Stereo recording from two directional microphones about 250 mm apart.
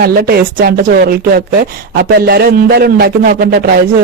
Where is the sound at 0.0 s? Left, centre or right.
Right.